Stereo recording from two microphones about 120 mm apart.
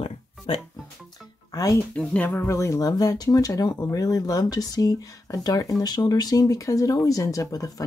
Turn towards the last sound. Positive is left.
turn(degrees=30)  # may be behind; listen again after turning